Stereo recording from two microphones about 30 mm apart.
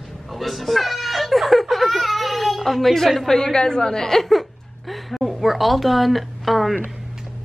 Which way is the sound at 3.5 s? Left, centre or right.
Left.